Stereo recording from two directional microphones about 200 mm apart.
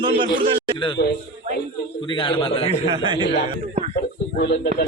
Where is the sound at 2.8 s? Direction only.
20° right (ahead or behind).